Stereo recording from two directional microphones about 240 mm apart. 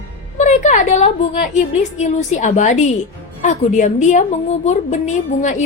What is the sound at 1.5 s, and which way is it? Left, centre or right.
A woman's voice, left.